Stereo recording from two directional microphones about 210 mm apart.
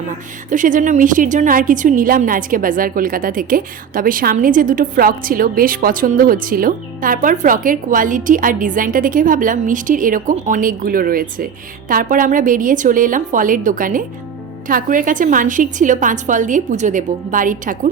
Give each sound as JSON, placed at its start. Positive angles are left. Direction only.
{"t": 0.5, "sound": "a woman's voice", "side_deg": -35}